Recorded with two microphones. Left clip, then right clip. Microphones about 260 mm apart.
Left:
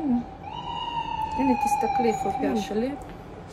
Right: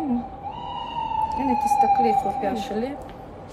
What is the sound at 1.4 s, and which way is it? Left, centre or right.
Speech, centre.